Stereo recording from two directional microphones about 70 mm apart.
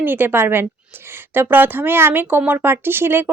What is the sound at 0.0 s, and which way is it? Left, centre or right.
Speech, right.